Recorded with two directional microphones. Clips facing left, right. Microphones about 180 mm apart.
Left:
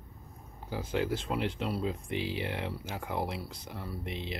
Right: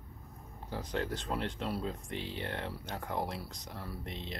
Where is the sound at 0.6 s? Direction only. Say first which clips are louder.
Left 4 dB; 5° left (ahead or behind).